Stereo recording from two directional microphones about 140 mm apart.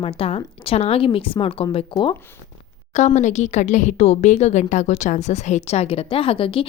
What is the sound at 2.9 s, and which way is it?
Speech, 60° left (ahead or behind).